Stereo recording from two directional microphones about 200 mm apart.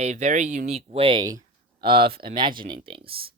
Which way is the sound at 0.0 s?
35° right (ahead or behind).